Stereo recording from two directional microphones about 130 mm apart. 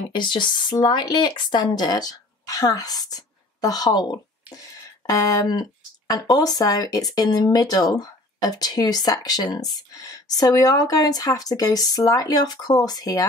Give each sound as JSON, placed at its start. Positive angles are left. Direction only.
{"t": 0.1, "sound": "speech", "side_deg": 35}